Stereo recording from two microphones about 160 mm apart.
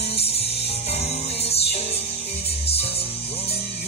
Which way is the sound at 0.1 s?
40° left (ahead or behind).